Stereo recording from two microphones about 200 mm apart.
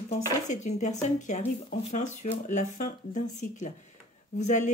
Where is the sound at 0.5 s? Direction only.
35° left (ahead or behind).